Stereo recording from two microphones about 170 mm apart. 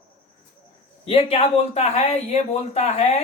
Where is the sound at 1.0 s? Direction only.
35° left (ahead or behind).